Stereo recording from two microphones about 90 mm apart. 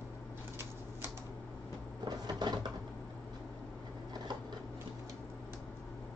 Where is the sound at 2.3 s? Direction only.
50° right (ahead or behind).